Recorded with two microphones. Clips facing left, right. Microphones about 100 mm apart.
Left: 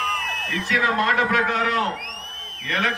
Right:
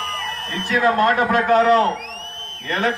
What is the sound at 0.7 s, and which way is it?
A man's voice, 35° right (ahead or behind).